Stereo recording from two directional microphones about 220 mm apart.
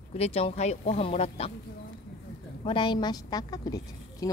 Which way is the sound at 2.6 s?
20° left (ahead or behind).